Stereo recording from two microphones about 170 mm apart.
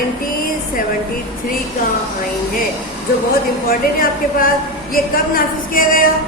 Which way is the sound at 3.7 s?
55° left (ahead or behind).